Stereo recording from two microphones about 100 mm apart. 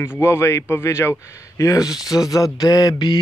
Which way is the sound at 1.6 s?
35° left (ahead or behind).